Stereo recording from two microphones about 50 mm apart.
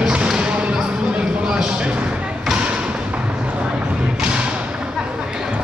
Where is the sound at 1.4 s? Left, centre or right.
Centre.